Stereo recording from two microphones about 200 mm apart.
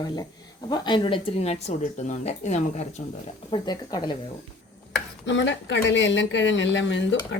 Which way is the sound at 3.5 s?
25° left (ahead or behind).